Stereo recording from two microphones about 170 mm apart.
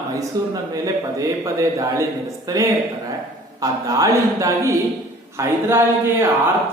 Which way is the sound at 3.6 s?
20° right (ahead or behind).